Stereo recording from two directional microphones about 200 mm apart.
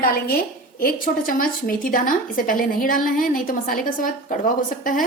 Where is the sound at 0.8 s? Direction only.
45° left (ahead or behind).